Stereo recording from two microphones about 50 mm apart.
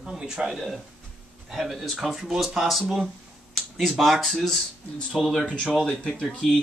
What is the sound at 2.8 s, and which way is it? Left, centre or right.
Speech, centre.